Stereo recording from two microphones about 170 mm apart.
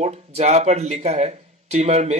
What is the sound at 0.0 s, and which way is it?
Speech, 40° right (ahead or behind).